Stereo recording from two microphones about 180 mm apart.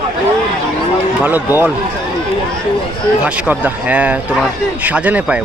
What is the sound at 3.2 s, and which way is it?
A man's voice, 5° right (ahead or behind).